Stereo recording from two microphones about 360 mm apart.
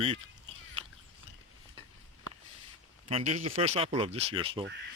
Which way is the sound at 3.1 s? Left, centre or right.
Centre.